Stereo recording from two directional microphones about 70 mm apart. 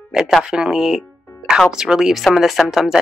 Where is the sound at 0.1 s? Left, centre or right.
Centre.